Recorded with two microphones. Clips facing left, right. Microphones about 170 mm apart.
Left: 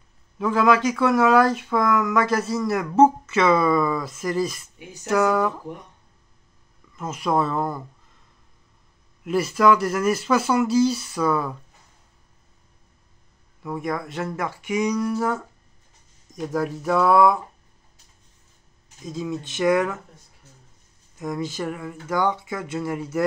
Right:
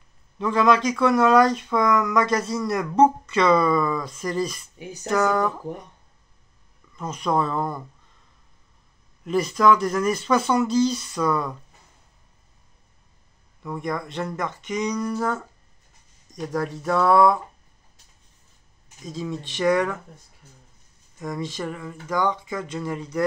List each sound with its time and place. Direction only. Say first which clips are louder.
0.4 s speech: left 1 dB; 5° left (ahead or behind)
7.0 s speech: left 1 dB; 5° left (ahead or behind)
9.2 s speech: left 1 dB; 5° left (ahead or behind)
13.6 s speech: left 1 dB; 5° left (ahead or behind)
19.0 s speech: left 2 dB; centre (ahead or behind)
21.2 s speech: left 2 dB; 5° left (ahead or behind)